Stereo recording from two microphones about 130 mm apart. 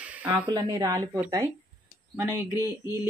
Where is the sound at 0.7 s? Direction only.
30° right (ahead or behind).